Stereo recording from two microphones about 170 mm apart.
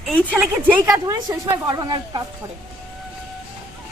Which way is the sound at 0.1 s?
10° left (ahead or behind).